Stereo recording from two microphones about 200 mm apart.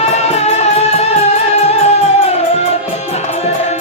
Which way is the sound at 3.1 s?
30° left (ahead or behind).